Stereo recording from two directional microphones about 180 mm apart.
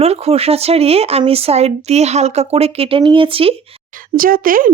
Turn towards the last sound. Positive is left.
turn(degrees=-50)  # may be behind; listen again after turning